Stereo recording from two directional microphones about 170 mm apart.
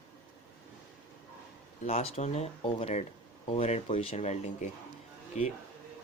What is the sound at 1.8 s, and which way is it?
Speech, 35° left (ahead or behind).